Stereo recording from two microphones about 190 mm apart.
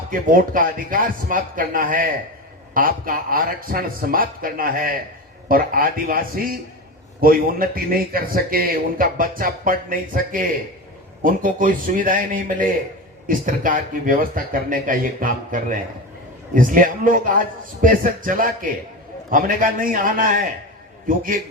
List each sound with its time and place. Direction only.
0.1 s speech: 45° right (ahead or behind)